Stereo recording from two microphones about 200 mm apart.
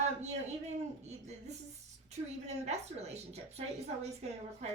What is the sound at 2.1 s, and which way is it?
A woman's voice, 35° right (ahead or behind).